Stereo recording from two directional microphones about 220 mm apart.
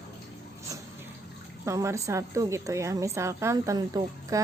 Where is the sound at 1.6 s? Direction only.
15° right (ahead or behind).